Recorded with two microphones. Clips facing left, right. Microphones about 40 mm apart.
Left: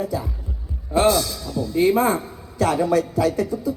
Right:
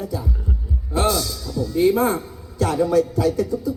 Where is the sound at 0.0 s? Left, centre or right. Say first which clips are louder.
Left 1 dB; left.